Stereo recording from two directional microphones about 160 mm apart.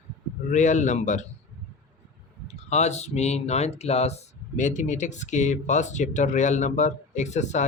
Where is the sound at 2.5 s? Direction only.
45° left (ahead or behind).